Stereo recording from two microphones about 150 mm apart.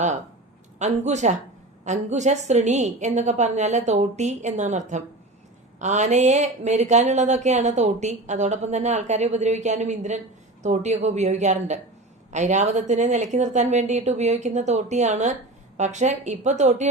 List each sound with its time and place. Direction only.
0.8 s speech: 50° right (ahead or behind)